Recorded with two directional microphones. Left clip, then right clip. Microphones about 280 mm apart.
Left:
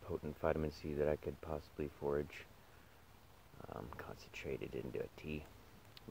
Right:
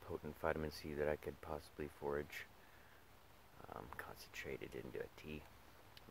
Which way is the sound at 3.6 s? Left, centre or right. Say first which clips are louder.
Left 2 dB; centre.